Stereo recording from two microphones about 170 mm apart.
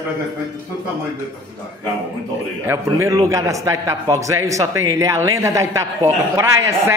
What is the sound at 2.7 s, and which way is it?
A man's voice, 15° right (ahead or behind).